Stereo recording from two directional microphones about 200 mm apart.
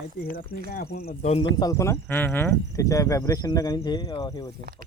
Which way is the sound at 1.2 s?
30° left (ahead or behind).